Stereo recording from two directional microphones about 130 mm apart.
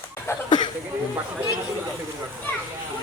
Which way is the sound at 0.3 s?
20° left (ahead or behind).